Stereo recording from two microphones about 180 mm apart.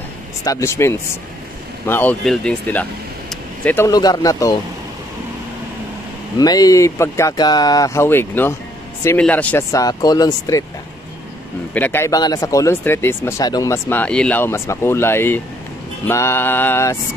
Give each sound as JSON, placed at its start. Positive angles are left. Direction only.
{"t": 0.4, "sound": "speech", "side_deg": 20}
{"t": 6.3, "sound": "speech", "side_deg": 20}
{"t": 11.7, "sound": "speech", "side_deg": 10}